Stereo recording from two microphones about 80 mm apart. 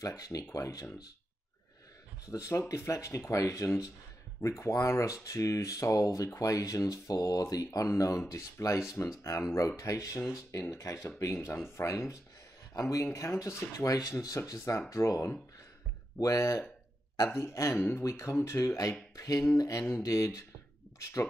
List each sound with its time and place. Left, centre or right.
0.0 s speech: left
2.3 s speech: left